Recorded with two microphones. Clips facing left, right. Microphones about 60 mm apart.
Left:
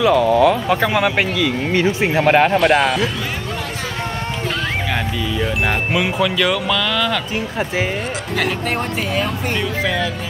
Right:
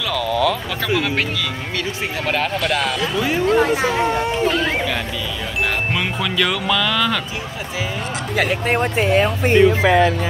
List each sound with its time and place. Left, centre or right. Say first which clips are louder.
0.7 s speech: left 5 dB; left
2.6 s speech: left 6 dB; centre
5.9 s speech: left 3 dB; centre
8.6 s speech: right 3 dB; centre
9.1 s speech: right 8 dB; right